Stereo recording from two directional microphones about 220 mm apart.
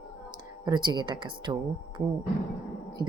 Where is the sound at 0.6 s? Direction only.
20° right (ahead or behind).